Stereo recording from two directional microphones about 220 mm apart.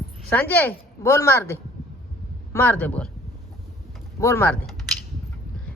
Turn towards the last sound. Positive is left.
turn(degrees=5)  # may be behind; listen again after turning